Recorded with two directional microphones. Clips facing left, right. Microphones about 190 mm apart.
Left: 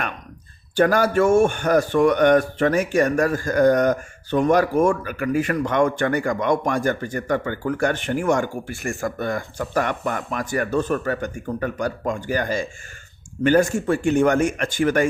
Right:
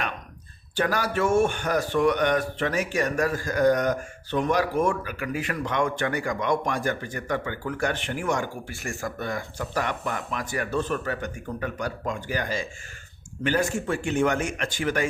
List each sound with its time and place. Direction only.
0.8 s a man's voice: 50° left (ahead or behind)